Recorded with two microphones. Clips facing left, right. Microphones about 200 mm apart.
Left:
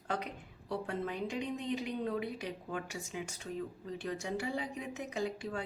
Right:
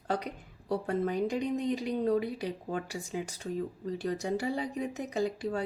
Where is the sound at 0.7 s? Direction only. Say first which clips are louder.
Right 7 dB; 40° right (ahead or behind).